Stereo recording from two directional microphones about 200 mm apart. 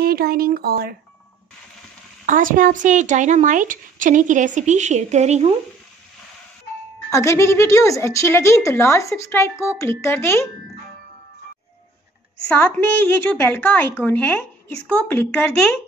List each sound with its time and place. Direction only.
0.0 s speech: 50° right (ahead or behind)
2.2 s speech: 45° right (ahead or behind)
7.1 s a woman's voice: 15° left (ahead or behind)
12.4 s a woman's voice: 10° left (ahead or behind)